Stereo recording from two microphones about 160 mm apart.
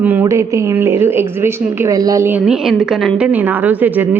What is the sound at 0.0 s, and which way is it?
A woman's voice, 10° right (ahead or behind).